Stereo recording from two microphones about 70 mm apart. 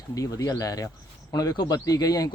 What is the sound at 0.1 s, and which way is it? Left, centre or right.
Speech, left.